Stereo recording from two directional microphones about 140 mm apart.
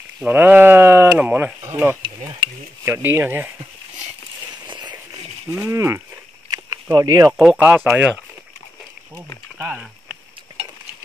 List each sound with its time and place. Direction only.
0.2 s speech: 10° right (ahead or behind)
2.0 s mechanisms: 35° right (ahead or behind)
2.8 s speech: 15° right (ahead or behind)
4.6 s a sound: 30° right (ahead or behind)
5.5 s speech: 10° right (ahead or behind)
5.8 s speech: 20° right (ahead or behind)
6.5 s a sound: 25° right (ahead or behind)
7.3 s speech: 10° right (ahead or behind)